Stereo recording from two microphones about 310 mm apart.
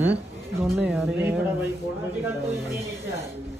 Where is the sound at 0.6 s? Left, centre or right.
Centre.